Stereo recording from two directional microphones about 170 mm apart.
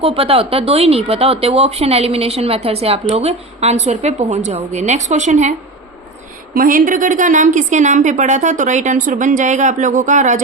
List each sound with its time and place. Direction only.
0.0 s a woman's voice: 35° right (ahead or behind)
6.6 s a woman's voice: 55° right (ahead or behind)